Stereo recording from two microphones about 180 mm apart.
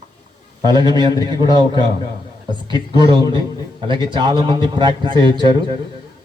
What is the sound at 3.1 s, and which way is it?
A man's voice, 25° right (ahead or behind).